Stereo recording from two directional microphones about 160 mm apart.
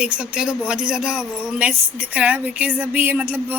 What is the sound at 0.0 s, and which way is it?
Speech, 5° right (ahead or behind).